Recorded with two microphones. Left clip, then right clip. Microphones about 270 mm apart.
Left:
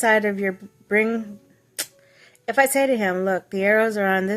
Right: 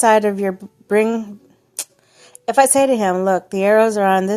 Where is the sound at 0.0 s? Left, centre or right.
Centre.